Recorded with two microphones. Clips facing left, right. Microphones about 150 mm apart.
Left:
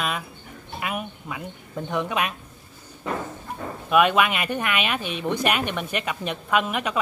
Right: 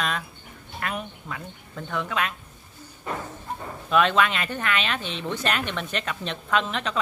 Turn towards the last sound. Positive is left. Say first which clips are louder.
# left 2 dB
turn(degrees=10)  # may be behind; listen again after turning